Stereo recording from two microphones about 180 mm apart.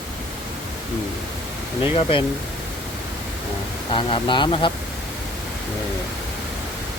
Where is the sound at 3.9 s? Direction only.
30° left (ahead or behind).